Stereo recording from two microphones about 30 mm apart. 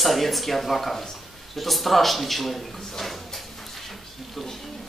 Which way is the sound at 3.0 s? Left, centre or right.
Centre.